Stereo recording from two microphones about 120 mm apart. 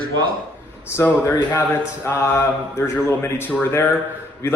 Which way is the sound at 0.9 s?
15° left (ahead or behind).